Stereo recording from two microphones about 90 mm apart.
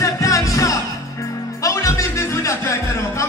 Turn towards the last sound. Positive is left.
turn(degrees=30)  # may be behind; listen again after turning